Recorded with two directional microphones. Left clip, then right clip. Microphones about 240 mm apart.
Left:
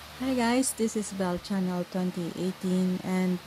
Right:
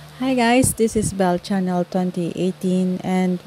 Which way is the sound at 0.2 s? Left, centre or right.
Right.